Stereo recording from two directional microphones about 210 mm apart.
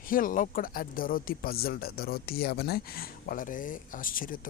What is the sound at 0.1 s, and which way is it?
Speech, 40° left (ahead or behind).